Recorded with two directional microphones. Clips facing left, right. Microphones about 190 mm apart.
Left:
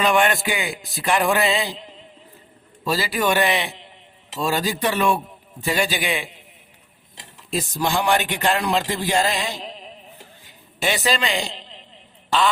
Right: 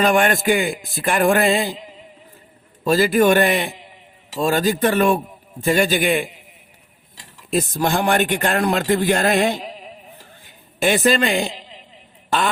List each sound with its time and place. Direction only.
0.0 s speech: 50° right (ahead or behind)
1.8 s a sound: 10° right (ahead or behind)
2.8 s speech: 50° right (ahead or behind)
7.5 s speech: 55° right (ahead or behind)
9.6 s music: 10° right (ahead or behind)
10.8 s speech: 55° right (ahead or behind)
11.5 s a sound: 10° right (ahead or behind)
12.3 s speech: 55° right (ahead or behind)